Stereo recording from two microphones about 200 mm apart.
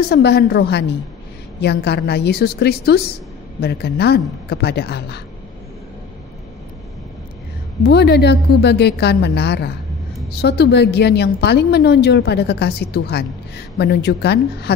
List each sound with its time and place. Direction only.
0.1 s a woman's voice: 55° left (ahead or behind)
7.8 s a woman's voice: 55° left (ahead or behind)